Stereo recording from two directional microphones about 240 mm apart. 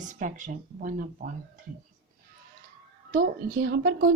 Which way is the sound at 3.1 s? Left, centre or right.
Right.